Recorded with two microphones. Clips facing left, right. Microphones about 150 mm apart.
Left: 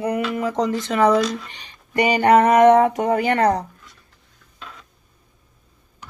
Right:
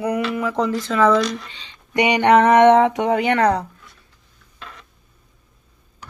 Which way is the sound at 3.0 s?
65° right (ahead or behind).